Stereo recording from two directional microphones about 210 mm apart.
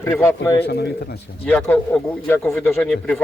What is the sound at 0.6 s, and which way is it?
Speech, 50° left (ahead or behind).